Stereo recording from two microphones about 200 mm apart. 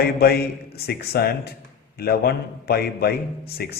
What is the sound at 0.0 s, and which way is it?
A man's voice, 50° left (ahead or behind).